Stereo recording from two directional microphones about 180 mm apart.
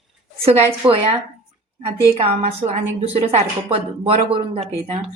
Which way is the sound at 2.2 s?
35° right (ahead or behind).